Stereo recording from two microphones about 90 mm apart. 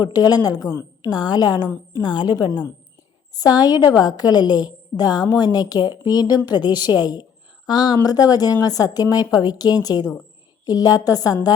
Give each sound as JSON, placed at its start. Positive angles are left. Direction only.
{"t": 0.0, "sound": "a woman's voice", "side_deg": 50}